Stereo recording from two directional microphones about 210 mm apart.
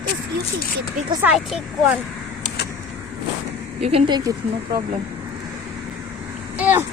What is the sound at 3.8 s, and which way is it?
Speech, 25° right (ahead or behind).